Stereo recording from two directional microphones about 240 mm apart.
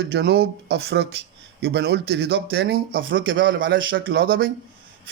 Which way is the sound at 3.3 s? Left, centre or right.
Right.